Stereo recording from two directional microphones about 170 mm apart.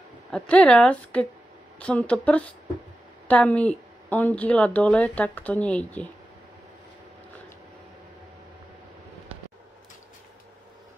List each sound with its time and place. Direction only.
0.3 s speech: 5° left (ahead or behind)